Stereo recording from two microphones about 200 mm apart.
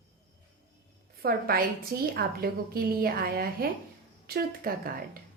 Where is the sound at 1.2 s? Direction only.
50° right (ahead or behind).